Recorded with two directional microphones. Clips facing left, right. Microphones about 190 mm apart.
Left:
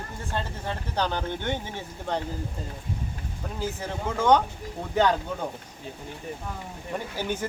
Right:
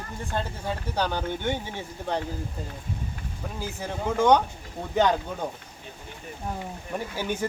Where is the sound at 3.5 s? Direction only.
15° right (ahead or behind).